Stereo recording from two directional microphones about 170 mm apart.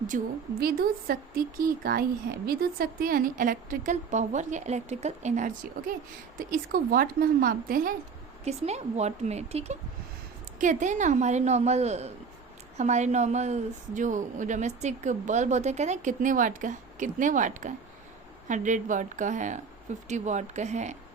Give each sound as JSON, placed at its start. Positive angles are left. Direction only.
{"t": 0.1, "sound": "a woman's voice", "side_deg": -50}
{"t": 6.3, "sound": "a woman's voice", "side_deg": -55}
{"t": 8.4, "sound": "a woman's voice", "side_deg": -40}